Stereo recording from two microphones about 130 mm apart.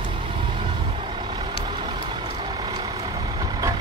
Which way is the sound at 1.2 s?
35° right (ahead or behind).